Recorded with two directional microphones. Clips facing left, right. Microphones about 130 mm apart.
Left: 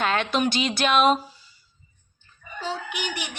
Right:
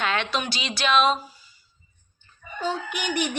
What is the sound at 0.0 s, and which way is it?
A woman's voice, 45° left (ahead or behind).